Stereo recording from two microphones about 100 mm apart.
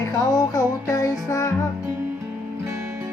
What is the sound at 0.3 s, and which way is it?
Music, 30° left (ahead or behind).